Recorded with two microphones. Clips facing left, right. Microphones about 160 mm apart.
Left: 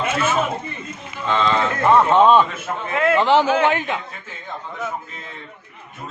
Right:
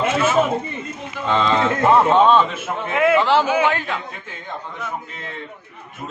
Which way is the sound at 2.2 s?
15° left (ahead or behind).